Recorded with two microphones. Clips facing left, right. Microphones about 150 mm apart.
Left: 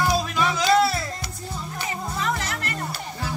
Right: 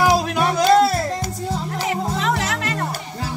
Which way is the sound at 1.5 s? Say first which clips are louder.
Right 7 dB; 90° right.